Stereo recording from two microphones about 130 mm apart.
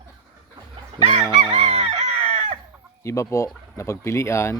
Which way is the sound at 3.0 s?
25° left (ahead or behind).